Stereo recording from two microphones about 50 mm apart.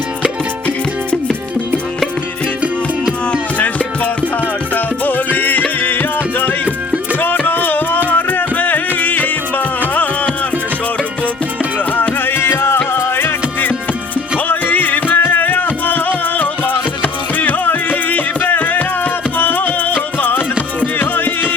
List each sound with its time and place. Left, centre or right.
3.6 s music: left
11.9 s music: left